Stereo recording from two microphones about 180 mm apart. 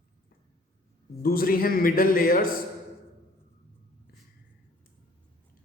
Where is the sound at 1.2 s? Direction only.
55° left (ahead or behind).